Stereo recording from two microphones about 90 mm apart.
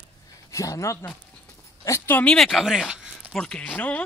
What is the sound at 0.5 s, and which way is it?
Speech, 35° left (ahead or behind).